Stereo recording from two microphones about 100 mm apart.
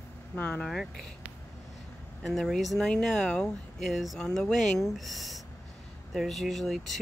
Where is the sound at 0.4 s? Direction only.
20° left (ahead or behind).